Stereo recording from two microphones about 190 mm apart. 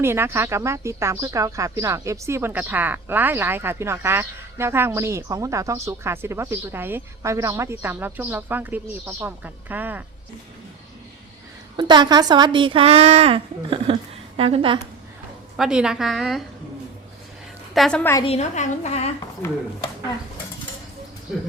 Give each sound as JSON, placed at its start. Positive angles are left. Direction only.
{"t": 0.0, "sound": "speech", "side_deg": -15}
{"t": 11.8, "sound": "a woman's voice", "side_deg": -25}
{"t": 15.5, "sound": "a woman's voice", "side_deg": -5}
{"t": 17.7, "sound": "a woman's voice", "side_deg": 5}
{"t": 18.3, "sound": "a woman's voice", "side_deg": 35}
{"t": 19.4, "sound": "speech", "side_deg": 15}